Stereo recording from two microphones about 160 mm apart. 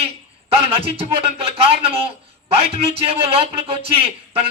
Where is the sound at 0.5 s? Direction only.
35° right (ahead or behind).